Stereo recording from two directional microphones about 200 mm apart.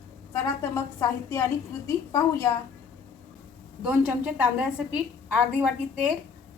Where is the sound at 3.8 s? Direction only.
5° right (ahead or behind).